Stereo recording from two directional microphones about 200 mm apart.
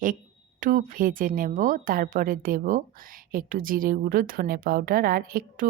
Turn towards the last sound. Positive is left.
turn(degrees=-45)  # may be behind; listen again after turning